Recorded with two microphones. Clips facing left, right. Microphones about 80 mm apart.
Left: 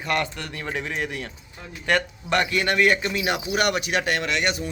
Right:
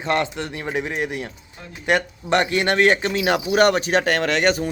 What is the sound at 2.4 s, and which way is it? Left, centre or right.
A man's voice, right.